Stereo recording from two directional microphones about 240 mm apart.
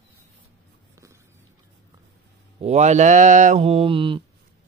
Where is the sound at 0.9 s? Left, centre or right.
Centre.